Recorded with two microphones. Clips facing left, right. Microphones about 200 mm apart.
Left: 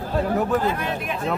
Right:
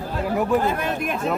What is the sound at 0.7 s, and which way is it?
Speech, 50° right (ahead or behind).